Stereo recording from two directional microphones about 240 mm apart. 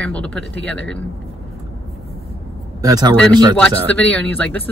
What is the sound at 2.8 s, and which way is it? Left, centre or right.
Speech, centre.